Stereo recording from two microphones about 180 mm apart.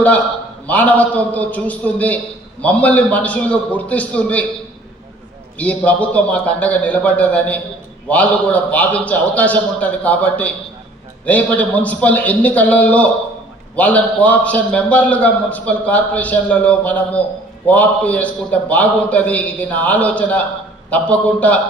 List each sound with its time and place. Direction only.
0.7 s a man's voice: 10° left (ahead or behind)
5.5 s a man's voice: 10° left (ahead or behind)